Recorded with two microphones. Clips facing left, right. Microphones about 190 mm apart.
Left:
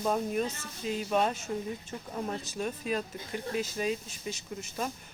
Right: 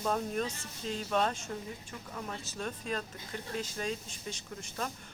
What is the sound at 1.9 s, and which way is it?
Speech, 30° left (ahead or behind).